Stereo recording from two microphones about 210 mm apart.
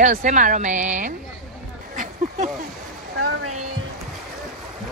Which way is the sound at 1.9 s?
35° right (ahead or behind).